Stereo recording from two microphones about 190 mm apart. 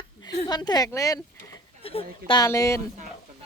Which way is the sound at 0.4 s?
20° left (ahead or behind).